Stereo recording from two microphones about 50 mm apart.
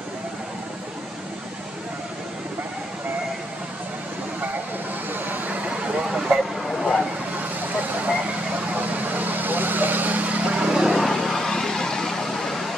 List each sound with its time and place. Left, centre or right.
5.1 s vehicle: right
6.1 s vehicle: centre
6.7 s vehicle: centre
8.9 s vehicle: right; by 12.7 s centre